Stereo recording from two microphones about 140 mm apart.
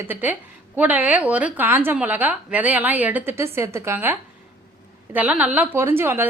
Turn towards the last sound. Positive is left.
turn(degrees=-15)  # may be behind; listen again after turning